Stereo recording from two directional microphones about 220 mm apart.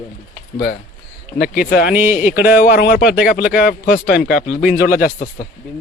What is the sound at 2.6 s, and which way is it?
Speech, 45° left (ahead or behind).